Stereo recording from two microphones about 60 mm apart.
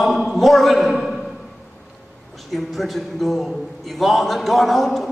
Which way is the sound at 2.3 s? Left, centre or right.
Centre.